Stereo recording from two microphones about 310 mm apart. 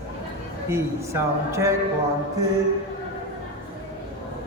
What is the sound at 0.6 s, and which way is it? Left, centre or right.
Speech, centre.